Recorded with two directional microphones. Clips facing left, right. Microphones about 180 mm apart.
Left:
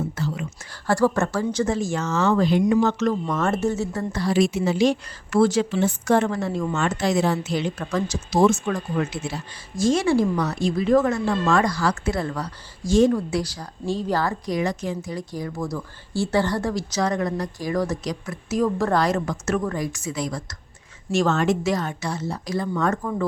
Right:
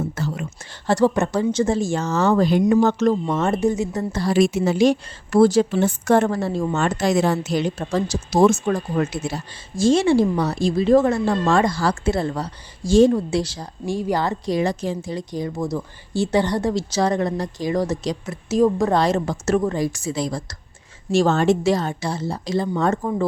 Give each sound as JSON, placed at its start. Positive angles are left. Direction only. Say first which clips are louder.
{"t": 0.2, "sound": "whispering", "louder": "right 1 dB", "side_deg": -45}
{"t": 0.7, "sound": "a woman's voice", "louder": "right 2 dB", "side_deg": -20}
{"t": 2.8, "sound": "a woman's voice", "louder": "right 4 dB", "side_deg": -30}
{"t": 4.3, "sound": "speech", "louder": "right 3 dB", "side_deg": -50}
{"t": 5.8, "sound": "a woman's voice", "louder": "right 3 dB", "side_deg": -50}
{"t": 7.8, "sound": "a woman's voice", "louder": "right 3 dB", "side_deg": -30}
{"t": 9.7, "sound": "a woman's voice", "louder": "right 3 dB", "side_deg": -30}
{"t": 13.8, "sound": "a woman's voice", "louder": "right 2 dB", "side_deg": -15}